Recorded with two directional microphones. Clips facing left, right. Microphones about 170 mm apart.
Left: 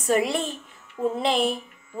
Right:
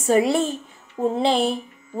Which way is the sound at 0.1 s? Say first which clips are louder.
Right 5 dB; 30° right (ahead or behind).